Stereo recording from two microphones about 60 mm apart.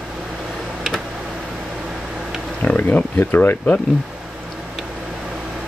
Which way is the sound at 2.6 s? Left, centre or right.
Left.